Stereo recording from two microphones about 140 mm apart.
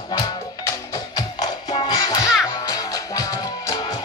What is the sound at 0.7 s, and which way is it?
Music, 30° left (ahead or behind).